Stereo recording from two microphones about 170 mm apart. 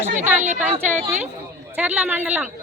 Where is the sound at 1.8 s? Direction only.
10° right (ahead or behind).